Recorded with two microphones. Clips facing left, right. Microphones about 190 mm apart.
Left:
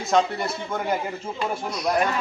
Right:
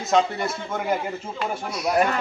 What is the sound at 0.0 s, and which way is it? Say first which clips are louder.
A man's voice: even; centre (ahead or behind).